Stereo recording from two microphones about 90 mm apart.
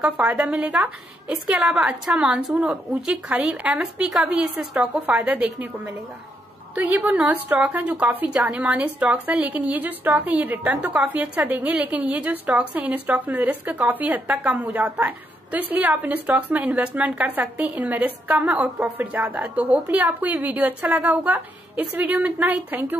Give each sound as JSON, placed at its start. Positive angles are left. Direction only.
{"t": 0.2, "sound": "a woman's voice", "side_deg": -15}